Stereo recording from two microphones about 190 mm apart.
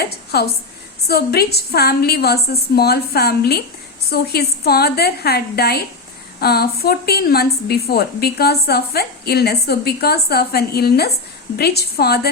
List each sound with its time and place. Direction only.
0.0 s a woman's voice: 55° left (ahead or behind)